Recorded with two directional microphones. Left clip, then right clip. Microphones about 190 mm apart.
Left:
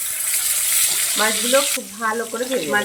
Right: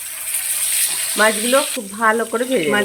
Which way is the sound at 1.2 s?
50° right (ahead or behind).